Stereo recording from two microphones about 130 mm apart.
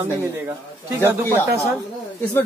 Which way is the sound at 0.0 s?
20° right (ahead or behind).